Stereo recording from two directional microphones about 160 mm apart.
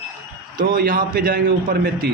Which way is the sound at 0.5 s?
65° right (ahead or behind).